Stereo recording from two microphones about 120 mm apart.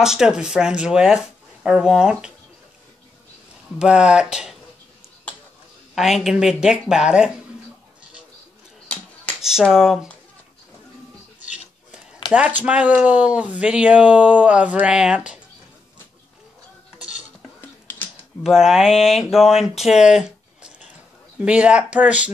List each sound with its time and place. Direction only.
0.0 s speech: 5° right (ahead or behind)
3.7 s speech: 5° right (ahead or behind)
5.9 s speech: centre (ahead or behind)
8.8 s a sound: 10° left (ahead or behind)
9.4 s speech: 5° right (ahead or behind)
12.3 s speech: 15° right (ahead or behind)
17.6 s typing: 15° left (ahead or behind)
18.4 s speech: 5° right (ahead or behind)